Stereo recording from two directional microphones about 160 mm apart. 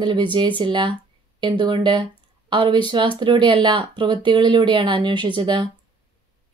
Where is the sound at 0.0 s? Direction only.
30° right (ahead or behind).